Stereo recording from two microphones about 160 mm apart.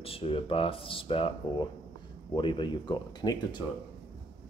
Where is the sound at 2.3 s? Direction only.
30° left (ahead or behind).